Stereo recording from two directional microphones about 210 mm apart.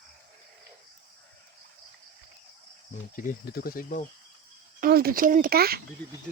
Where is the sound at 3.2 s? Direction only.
45° left (ahead or behind).